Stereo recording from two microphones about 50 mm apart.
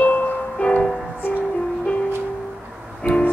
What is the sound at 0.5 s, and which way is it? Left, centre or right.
Music, centre.